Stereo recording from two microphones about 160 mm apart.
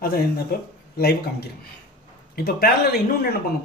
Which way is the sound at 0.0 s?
70° left (ahead or behind).